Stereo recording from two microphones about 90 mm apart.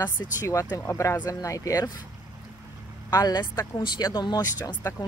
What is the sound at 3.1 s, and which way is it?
A woman's voice, 45° left (ahead or behind).